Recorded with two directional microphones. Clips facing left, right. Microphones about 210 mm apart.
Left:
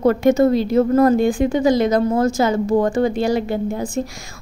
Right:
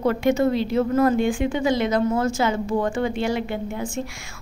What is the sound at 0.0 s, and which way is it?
A woman's voice, 45° left (ahead or behind).